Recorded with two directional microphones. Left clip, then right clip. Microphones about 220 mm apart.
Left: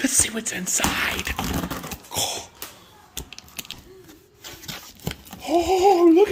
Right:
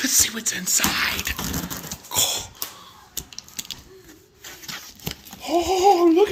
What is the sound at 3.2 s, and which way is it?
Typing, 15° left (ahead or behind).